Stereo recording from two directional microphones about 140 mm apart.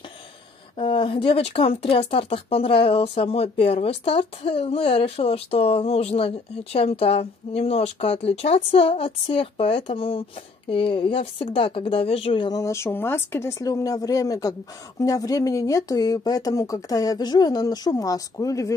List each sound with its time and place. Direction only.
0.7 s speech: 40° left (ahead or behind)
12.4 s speech: 25° left (ahead or behind)